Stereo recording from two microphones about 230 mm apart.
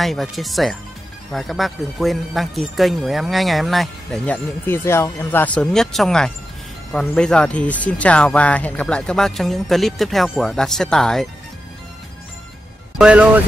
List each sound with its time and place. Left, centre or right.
0.0 s speech: centre
12.9 s speech: centre